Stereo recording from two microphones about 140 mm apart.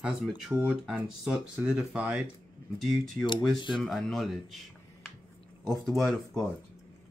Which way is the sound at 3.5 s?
35° left (ahead or behind).